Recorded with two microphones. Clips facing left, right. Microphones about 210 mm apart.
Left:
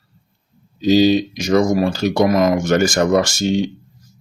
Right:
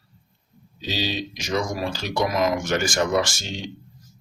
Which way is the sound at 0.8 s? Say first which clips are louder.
Left 15 dB; 45° left (ahead or behind).